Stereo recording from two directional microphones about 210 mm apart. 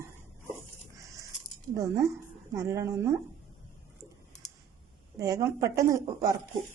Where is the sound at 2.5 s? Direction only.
15° right (ahead or behind).